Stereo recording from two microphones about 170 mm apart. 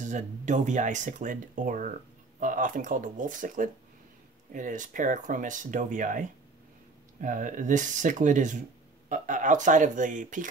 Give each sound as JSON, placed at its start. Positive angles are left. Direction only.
{"t": 0.0, "sound": "speech", "side_deg": -45}